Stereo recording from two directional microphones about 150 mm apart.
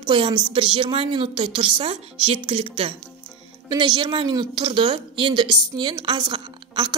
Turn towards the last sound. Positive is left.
turn(degrees=-30)  # may be behind; listen again after turning